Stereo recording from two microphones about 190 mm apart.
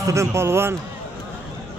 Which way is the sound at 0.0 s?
15° right (ahead or behind).